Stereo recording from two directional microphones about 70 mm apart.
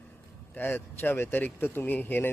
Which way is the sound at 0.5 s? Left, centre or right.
Left.